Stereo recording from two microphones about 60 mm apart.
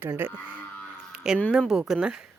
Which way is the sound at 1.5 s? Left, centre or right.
Centre.